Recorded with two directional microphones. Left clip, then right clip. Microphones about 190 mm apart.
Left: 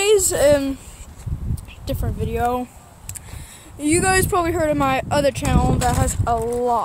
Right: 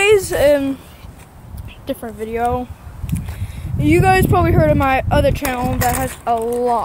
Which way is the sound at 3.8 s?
Centre (ahead or behind).